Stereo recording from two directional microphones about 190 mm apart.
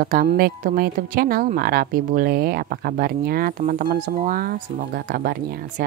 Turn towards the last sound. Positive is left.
turn(degrees=-50)  # may be behind; listen again after turning